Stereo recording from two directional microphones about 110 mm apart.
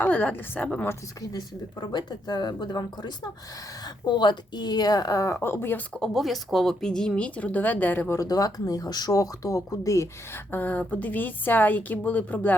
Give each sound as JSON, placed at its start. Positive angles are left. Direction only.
{"t": 0.0, "sound": "speech", "side_deg": 15}
{"t": 1.2, "sound": "speech", "side_deg": 35}
{"t": 6.0, "sound": "speech", "side_deg": 0}
{"t": 8.3, "sound": "speech", "side_deg": 35}
{"t": 10.5, "sound": "speech", "side_deg": 15}